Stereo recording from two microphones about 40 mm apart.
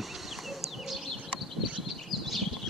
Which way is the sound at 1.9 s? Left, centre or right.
Centre.